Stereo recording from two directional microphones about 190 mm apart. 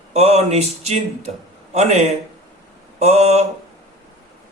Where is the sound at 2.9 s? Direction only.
35° right (ahead or behind).